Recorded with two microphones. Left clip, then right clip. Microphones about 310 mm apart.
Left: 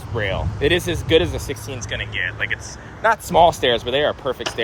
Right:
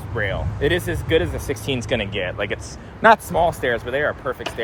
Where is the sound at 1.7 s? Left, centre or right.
Centre.